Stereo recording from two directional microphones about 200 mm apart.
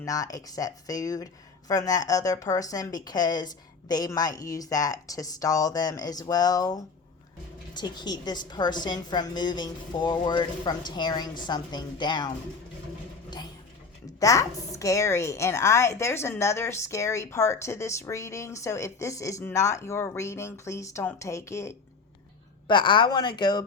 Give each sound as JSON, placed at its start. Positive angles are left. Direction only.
{"t": 0.0, "sound": "a woman's voice", "side_deg": 15}
{"t": 14.2, "sound": "a woman's voice", "side_deg": 15}